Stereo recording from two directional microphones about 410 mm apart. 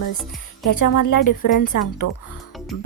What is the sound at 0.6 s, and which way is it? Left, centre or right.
Speech, left.